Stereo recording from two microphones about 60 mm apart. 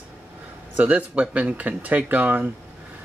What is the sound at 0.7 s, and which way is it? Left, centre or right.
Speech, right.